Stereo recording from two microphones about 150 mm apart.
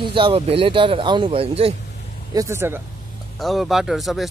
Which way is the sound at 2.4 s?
15° right (ahead or behind).